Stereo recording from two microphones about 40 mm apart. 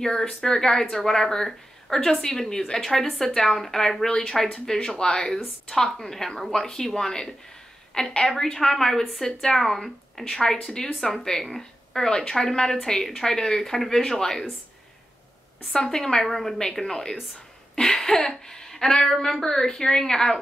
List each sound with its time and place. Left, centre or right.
0.0 s speech: centre
15.7 s speech: centre